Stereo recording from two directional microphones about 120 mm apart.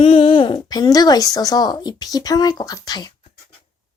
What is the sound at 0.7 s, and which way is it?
Speech, 30° left (ahead or behind).